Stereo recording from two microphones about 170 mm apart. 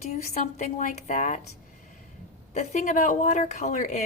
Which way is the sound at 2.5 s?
45° left (ahead or behind).